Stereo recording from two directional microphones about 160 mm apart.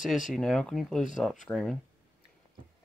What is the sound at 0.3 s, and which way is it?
Speech, 5° left (ahead or behind).